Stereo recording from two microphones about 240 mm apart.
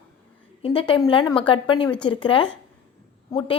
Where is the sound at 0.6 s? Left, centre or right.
Left.